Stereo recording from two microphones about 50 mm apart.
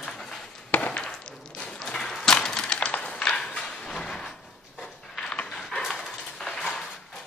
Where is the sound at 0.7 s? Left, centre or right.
Left.